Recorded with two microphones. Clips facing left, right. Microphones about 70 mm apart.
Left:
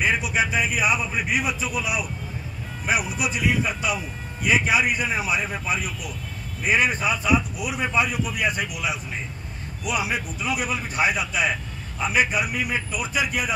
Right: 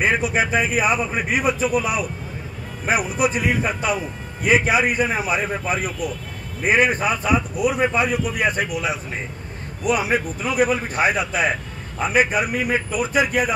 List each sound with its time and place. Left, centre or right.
0.0 s a man's voice: right